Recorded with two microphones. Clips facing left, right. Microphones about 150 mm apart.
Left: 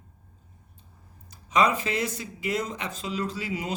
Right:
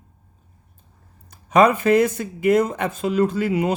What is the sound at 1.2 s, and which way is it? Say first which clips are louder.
Speech: right 8 dB; 55° right (ahead or behind).